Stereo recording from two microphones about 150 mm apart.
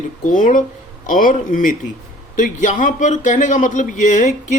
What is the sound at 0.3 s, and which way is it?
Speech, 60° left (ahead or behind).